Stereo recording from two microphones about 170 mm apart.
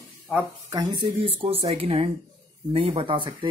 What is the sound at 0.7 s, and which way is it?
Speech, 30° right (ahead or behind).